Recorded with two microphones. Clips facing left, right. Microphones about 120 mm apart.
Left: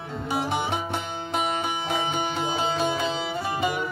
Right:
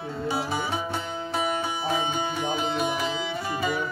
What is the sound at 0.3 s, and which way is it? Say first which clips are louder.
Music: left 3 dB; 20° left (ahead or behind).